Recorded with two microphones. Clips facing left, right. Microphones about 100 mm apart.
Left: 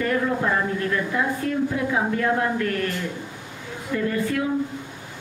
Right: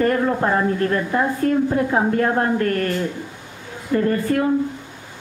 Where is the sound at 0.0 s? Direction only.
45° right (ahead or behind).